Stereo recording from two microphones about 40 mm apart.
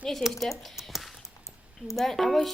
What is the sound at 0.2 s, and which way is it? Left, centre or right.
Speech, centre.